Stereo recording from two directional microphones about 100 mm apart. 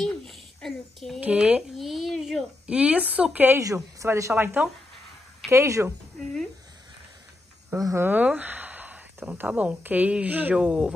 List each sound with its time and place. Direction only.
0.0 s a sound: 5° left (ahead or behind)
1.2 s speech: 10° right (ahead or behind)
1.8 s a sound: centre (ahead or behind)
2.6 s speech: 10° right (ahead or behind)
3.5 s a woman's voice: 30° right (ahead or behind)
7.7 s a woman's voice: 30° right (ahead or behind)
8.1 s speech: 15° right (ahead or behind)